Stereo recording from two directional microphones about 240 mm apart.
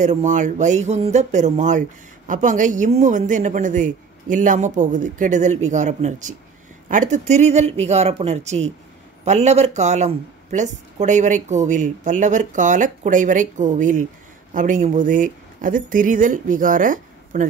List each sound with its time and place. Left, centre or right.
0.0 s speech: right